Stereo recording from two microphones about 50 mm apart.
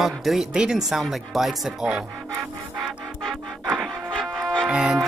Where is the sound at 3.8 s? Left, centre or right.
Centre.